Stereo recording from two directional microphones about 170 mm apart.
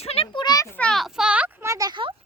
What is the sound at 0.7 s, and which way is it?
A child's voice, 5° left (ahead or behind).